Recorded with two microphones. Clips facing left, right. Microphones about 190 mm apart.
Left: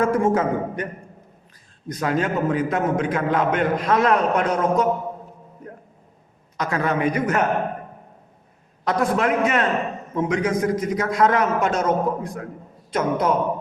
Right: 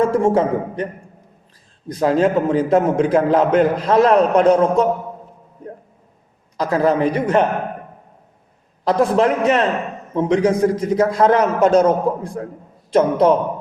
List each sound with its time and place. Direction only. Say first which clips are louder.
0.1 s a man's voice: right 4 dB; 30° right (ahead or behind)
2.0 s a man's voice: right 7 dB; 30° right (ahead or behind)
6.6 s a man's voice: right 6 dB; 35° right (ahead or behind)
8.8 s a man's voice: right 5 dB; 30° right (ahead or behind)